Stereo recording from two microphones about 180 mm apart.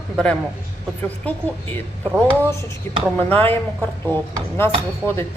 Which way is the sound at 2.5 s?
15° left (ahead or behind).